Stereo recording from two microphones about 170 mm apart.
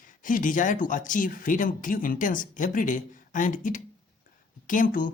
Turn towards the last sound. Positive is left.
turn(degrees=50)  # may be behind; listen again after turning